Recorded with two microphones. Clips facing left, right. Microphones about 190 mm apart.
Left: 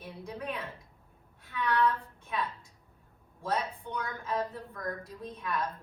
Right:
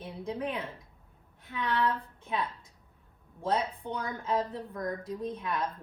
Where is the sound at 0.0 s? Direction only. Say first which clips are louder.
Right 5 dB; 25° right (ahead or behind).